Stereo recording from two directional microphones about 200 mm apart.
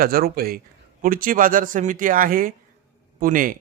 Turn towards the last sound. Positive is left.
turn(degrees=-45)  # may be behind; listen again after turning